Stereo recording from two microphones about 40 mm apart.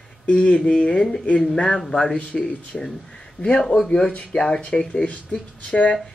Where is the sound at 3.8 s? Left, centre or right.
Left.